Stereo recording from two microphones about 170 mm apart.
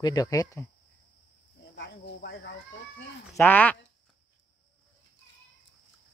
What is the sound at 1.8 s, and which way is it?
Cricket, 75° left (ahead or behind).